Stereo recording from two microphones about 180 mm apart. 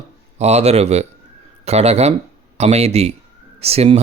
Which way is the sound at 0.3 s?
35° right (ahead or behind).